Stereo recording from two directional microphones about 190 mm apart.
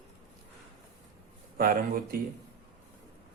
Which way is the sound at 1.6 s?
50° right (ahead or behind).